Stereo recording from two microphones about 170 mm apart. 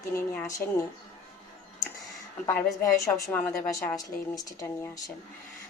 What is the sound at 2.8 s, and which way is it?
A woman's voice, 20° left (ahead or behind).